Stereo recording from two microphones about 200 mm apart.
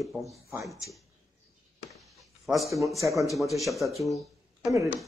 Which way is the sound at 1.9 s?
Centre (ahead or behind).